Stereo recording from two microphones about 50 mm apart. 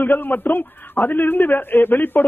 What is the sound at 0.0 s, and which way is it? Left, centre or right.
A man's voice, left.